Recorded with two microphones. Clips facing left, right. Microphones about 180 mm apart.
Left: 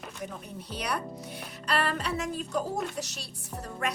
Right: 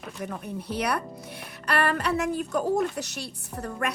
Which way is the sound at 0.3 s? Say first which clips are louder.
Right 7 dB; 60° right (ahead or behind).